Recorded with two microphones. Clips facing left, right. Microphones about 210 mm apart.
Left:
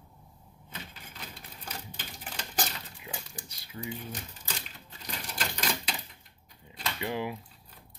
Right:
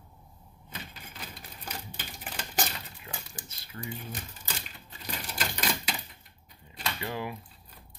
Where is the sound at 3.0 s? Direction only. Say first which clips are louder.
Left 1 dB; 15° left (ahead or behind).